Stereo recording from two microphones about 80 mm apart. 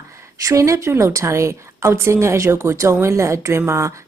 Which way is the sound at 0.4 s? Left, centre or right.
Right.